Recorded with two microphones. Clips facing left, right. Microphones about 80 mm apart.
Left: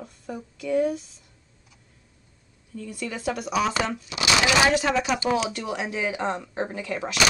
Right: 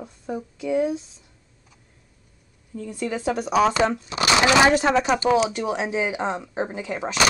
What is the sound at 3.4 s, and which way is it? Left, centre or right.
Speech, right.